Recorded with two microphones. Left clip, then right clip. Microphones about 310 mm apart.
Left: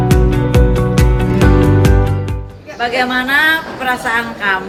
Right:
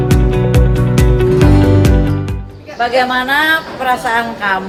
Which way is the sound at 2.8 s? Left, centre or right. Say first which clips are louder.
Right 2 dB; right.